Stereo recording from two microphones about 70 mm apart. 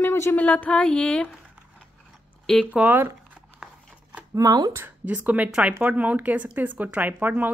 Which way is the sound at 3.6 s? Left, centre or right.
Centre.